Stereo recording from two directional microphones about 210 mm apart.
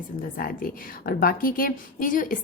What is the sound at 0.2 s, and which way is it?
A woman's voice, 45° left (ahead or behind).